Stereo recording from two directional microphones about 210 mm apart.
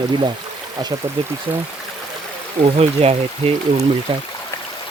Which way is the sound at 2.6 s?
30° right (ahead or behind).